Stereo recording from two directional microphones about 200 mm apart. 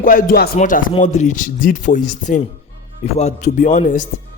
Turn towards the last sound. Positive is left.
turn(degrees=40)  # may be behind; listen again after turning